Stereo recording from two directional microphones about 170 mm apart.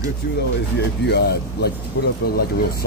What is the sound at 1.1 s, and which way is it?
Speech, 70° left (ahead or behind).